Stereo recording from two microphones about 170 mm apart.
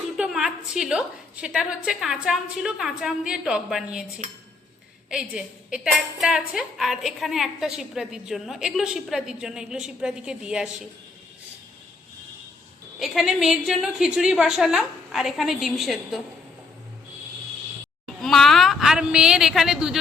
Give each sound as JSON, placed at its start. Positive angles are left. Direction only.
{"t": 0.2, "sound": "a woman's voice", "side_deg": -5}
{"t": 5.0, "sound": "a woman's voice", "side_deg": -5}
{"t": 13.0, "sound": "a woman's voice", "side_deg": 0}
{"t": 18.0, "sound": "a woman's voice", "side_deg": 0}